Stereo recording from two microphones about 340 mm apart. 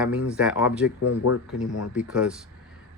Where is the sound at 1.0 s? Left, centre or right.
Left.